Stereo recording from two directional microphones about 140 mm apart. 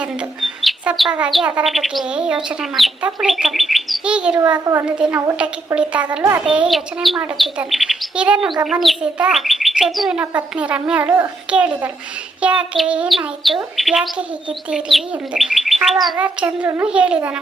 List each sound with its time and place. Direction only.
0.4 s bird: centre (ahead or behind)
4.6 s speech: 20° right (ahead or behind)
4.9 s speech: 10° right (ahead or behind)
6.4 s bird: 5° right (ahead or behind)
8.6 s speech: centre (ahead or behind)
12.4 s bird: 10° right (ahead or behind)
16.1 s speech: 10° right (ahead or behind)